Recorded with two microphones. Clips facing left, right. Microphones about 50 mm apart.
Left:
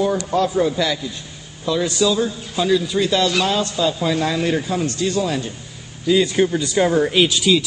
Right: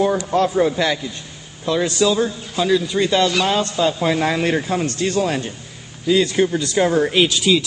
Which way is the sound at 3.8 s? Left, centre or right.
Right.